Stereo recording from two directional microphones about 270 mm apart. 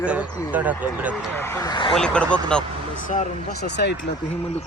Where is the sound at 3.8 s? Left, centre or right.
Left.